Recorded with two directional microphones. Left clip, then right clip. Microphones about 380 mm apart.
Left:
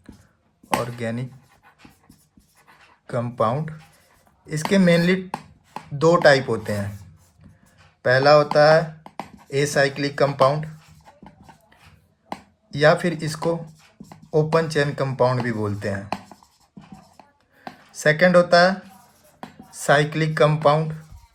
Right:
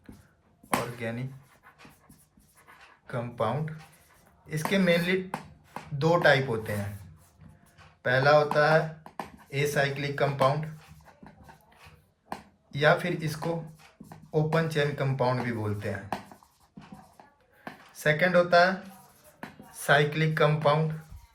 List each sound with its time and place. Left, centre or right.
0.7 s speech: centre
3.1 s speech: centre
8.0 s speech: centre
12.7 s speech: centre
17.6 s speech: centre